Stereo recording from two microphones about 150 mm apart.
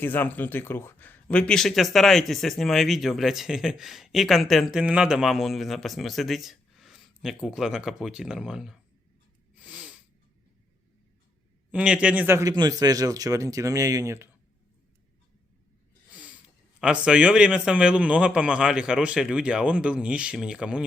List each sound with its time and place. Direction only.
0.0 s speech: 15° left (ahead or behind); by 8.8 s 5° right (ahead or behind)
9.6 s wheeze: 10° right (ahead or behind)
11.7 s a man's voice: 5° right (ahead or behind)
16.8 s a man's voice: 5° right (ahead or behind)